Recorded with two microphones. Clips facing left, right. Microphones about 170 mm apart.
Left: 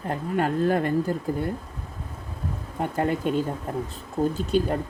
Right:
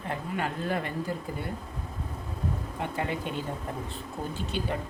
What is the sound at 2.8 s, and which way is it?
Speech, 45° left (ahead or behind).